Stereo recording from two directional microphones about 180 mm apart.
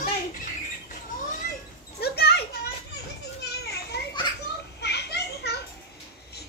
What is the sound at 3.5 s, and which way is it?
Children playing, 65° left (ahead or behind).